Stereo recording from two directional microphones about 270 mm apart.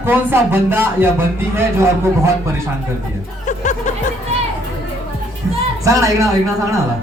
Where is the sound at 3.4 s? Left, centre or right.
Left.